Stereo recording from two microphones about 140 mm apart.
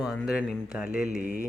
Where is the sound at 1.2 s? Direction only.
65° right (ahead or behind).